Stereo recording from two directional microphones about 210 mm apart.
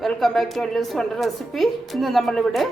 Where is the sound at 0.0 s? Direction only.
Centre (ahead or behind).